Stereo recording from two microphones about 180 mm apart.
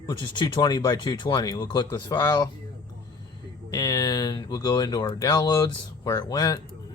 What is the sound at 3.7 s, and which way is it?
Speech, 20° left (ahead or behind).